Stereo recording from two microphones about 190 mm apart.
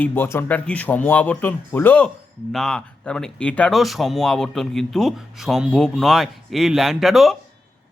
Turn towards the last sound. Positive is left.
turn(degrees=0)  # may be behind; listen again after turning